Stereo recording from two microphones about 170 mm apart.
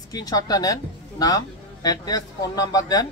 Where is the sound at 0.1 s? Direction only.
20° left (ahead or behind).